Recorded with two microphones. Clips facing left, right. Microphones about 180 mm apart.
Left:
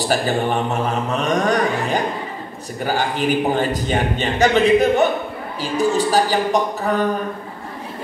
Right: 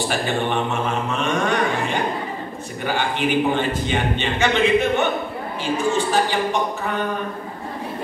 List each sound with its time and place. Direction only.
0.0 s a man's voice: 40° left (ahead or behind)